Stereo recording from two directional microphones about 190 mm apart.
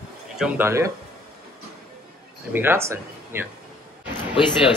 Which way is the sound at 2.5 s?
10° right (ahead or behind).